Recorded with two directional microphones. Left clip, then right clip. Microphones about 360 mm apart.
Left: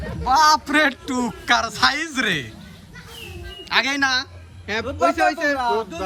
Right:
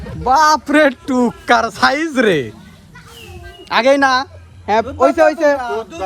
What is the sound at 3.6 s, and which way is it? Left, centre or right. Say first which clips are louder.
A man's voice: right 8 dB; centre.